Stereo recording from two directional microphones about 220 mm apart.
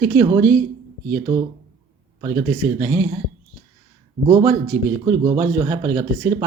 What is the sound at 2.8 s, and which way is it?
Speech, 20° right (ahead or behind).